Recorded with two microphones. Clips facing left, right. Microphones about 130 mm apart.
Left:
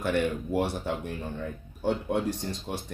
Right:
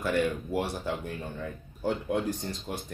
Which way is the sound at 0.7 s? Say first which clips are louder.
Left 1 dB; 30° left (ahead or behind).